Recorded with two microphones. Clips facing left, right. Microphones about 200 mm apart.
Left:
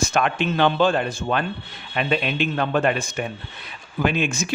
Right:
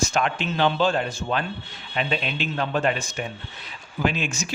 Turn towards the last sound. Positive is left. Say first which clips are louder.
# left 3 dB
turn(degrees=55)  # may be behind; listen again after turning